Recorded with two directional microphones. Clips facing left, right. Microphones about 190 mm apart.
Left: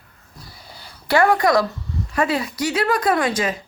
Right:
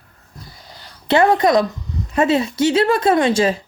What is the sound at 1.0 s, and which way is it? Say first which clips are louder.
A woman's voice: right 3 dB; 20° right (ahead or behind).